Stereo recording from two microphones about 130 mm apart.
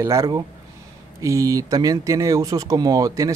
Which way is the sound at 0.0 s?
25° right (ahead or behind).